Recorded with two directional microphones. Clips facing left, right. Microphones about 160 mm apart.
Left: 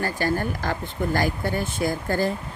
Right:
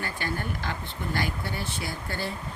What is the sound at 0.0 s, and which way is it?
Speech, 40° left (ahead or behind).